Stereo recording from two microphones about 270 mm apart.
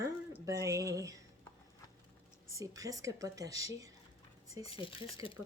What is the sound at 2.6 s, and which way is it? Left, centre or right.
Speech, centre.